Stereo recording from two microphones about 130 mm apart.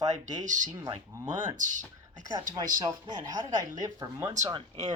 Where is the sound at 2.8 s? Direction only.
25° right (ahead or behind).